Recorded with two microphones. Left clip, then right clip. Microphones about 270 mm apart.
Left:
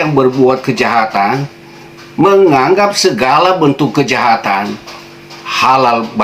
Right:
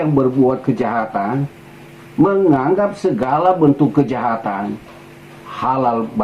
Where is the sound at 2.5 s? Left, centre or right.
Centre.